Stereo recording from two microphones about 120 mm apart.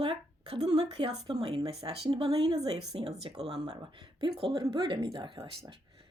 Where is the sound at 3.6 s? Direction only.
40° right (ahead or behind).